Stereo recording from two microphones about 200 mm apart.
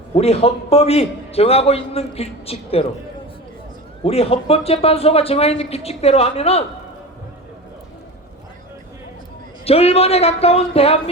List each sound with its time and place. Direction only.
0.1 s a man's voice: 30° left (ahead or behind)
4.0 s a man's voice: 30° left (ahead or behind)
9.6 s a man's voice: 30° left (ahead or behind)